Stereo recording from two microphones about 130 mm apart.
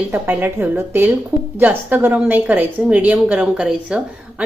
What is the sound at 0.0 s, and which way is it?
A woman's voice, 10° right (ahead or behind).